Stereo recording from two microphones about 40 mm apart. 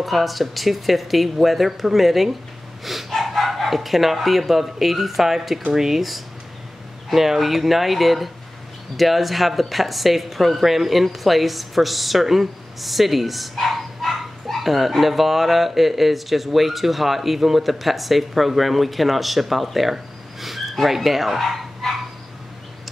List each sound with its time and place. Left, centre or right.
0.0 s speech: centre
2.8 s dog: centre
3.2 s speech: centre